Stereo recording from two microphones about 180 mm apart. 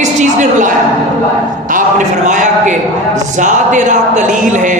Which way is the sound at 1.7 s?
45° right (ahead or behind).